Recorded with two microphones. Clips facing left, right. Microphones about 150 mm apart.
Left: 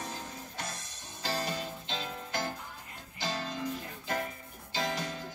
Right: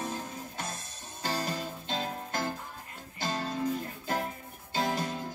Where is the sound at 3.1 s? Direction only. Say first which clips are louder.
Right 3 dB; 45° right (ahead or behind).